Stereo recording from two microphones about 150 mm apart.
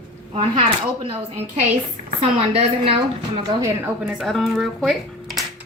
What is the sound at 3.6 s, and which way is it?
Speech, 20° right (ahead or behind).